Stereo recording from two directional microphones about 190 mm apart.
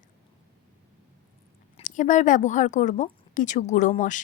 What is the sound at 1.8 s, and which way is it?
A woman's voice, 40° left (ahead or behind).